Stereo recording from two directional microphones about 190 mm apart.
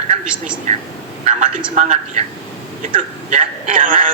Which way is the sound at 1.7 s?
40° right (ahead or behind).